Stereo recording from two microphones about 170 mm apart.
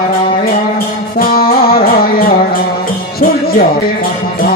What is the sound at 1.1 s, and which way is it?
Music, 60° left (ahead or behind).